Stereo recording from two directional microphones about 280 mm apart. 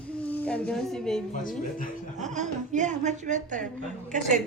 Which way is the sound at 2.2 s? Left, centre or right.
Right.